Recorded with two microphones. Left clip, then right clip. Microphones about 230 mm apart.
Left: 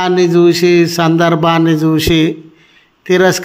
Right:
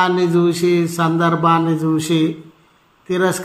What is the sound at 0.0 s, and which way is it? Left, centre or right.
A man's voice, left.